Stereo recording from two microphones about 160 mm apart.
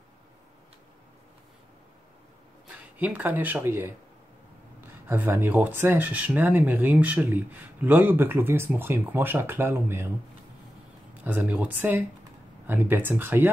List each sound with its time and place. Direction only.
2.7 s speech: 10° right (ahead or behind)
5.0 s speech: 15° right (ahead or behind)
11.2 s speech: 10° right (ahead or behind)